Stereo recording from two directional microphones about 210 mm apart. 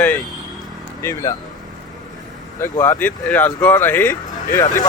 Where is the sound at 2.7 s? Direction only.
10° left (ahead or behind).